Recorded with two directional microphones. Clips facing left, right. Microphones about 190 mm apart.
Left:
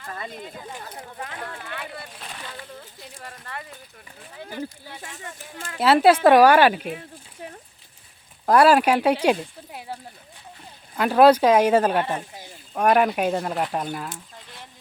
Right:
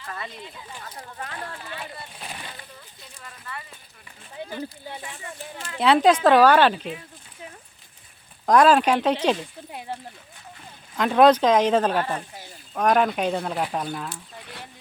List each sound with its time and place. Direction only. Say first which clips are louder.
0.1 s speech: left 2 dB; 45° left (ahead or behind)
1.2 s speech: even; 15° left (ahead or behind)
1.6 s speech: left 1 dB; 65° left (ahead or behind)
2.1 s speech: even; 10° right (ahead or behind)
2.7 s speech: left 6 dB; 55° left (ahead or behind)
4.4 s speech: right 3 dB; 20° right (ahead or behind)
5.2 s speech: right 1 dB; 50° left (ahead or behind)
5.8 s speech: left 2 dB; 5° left (ahead or behind)
8.4 s speech: left 1 dB; 10° left (ahead or behind)
10.9 s speech: left 1 dB; 5° left (ahead or behind)